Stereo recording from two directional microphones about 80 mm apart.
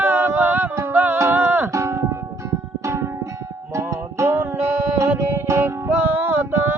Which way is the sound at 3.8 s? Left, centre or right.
Right.